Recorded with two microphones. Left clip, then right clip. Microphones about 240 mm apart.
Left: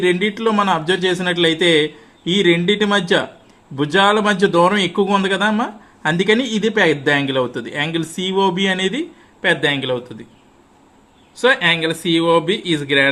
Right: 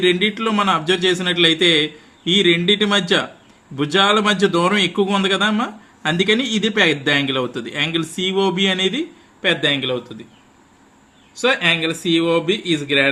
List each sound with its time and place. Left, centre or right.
0.0 s a man's voice: centre
11.3 s a man's voice: centre